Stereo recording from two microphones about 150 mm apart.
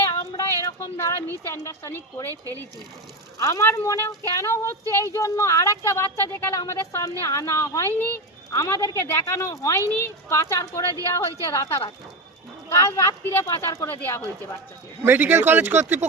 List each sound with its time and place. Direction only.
0.1 s a sound: 25° left (ahead or behind)
1.5 s speech: 20° left (ahead or behind)
2.3 s speech: 25° right (ahead or behind)
3.3 s speech: 20° left (ahead or behind)
15.0 s speech: 15° right (ahead or behind)